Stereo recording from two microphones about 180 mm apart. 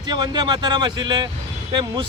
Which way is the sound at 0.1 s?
25° right (ahead or behind).